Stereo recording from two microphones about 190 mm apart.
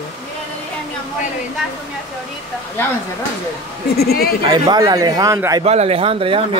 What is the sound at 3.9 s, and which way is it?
Speech, 55° left (ahead or behind).